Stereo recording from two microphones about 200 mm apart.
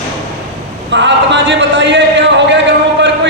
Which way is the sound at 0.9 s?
60° right (ahead or behind).